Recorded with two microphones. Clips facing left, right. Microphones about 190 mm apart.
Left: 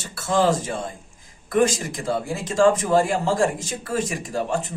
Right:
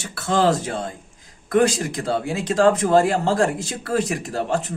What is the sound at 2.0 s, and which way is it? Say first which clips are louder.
Speech: right 1 dB; 65° right (ahead or behind).